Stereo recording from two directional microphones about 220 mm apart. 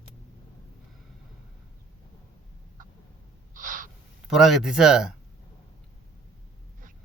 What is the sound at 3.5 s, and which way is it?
Gasp, 40° right (ahead or behind).